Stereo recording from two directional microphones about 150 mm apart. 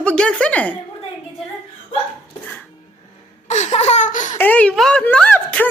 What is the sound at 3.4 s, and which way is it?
Laughter, 50° left (ahead or behind).